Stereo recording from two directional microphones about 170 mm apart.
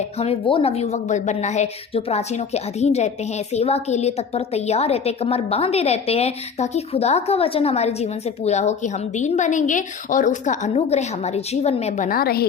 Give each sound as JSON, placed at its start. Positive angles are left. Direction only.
{"t": 0.2, "sound": "a woman's voice", "side_deg": 35}